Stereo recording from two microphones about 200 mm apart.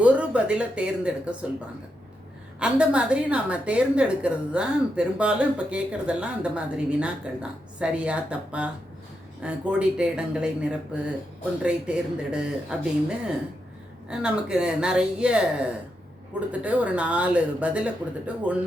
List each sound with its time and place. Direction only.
0.0 s speech: 5° right (ahead or behind)
2.6 s a woman's voice: 5° right (ahead or behind)